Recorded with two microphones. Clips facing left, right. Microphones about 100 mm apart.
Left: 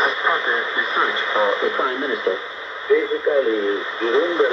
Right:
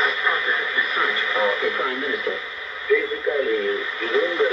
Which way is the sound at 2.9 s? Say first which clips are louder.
Left 4 dB; 25° left (ahead or behind).